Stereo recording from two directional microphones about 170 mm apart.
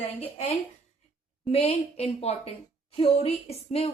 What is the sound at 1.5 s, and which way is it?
Speech, 35° left (ahead or behind).